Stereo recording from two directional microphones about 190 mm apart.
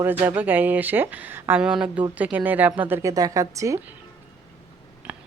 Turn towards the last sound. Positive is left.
turn(degrees=-15)  # may be behind; listen again after turning